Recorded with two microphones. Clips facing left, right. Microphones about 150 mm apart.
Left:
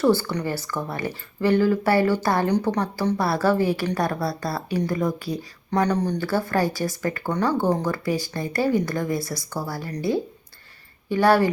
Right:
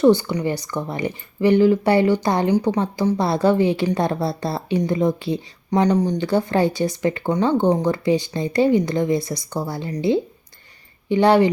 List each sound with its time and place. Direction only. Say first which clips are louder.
0.0 s speech: right 5 dB; 20° right (ahead or behind)
11.1 s speech: right 3 dB; 20° right (ahead or behind)